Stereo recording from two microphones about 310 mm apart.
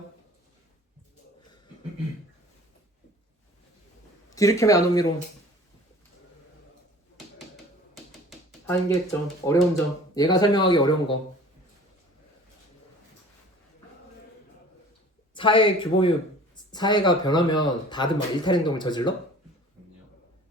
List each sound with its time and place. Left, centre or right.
4.4 s speech: centre
7.3 s typewriter: centre
8.6 s speech: centre
10.2 s speech: centre
15.4 s speech: centre